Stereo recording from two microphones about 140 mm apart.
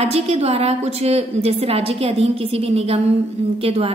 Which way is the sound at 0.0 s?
45° right (ahead or behind).